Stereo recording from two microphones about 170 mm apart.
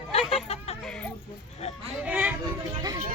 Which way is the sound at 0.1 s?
35° left (ahead or behind).